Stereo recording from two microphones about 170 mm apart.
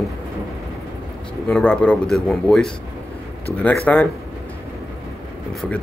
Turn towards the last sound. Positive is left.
turn(degrees=0)  # may be behind; listen again after turning